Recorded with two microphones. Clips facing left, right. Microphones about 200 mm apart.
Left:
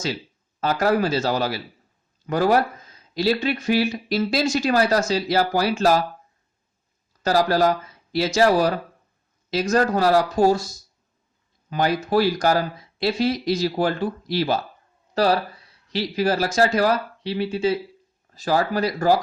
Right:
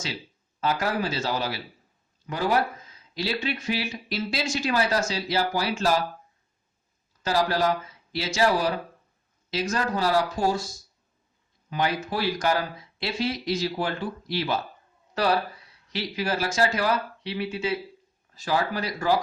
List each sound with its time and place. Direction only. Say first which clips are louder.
0.6 s speech: left 6 dB; 45° left (ahead or behind)
7.2 s speech: left 5 dB; 40° left (ahead or behind)
11.7 s speech: left 6 dB; 40° left (ahead or behind)
15.9 s speech: left 6 dB; 35° left (ahead or behind)